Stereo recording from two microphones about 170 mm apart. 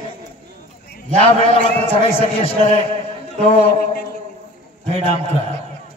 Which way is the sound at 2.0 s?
35° left (ahead or behind).